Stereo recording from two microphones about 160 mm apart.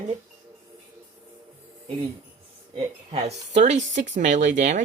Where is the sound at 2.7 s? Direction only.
40° right (ahead or behind).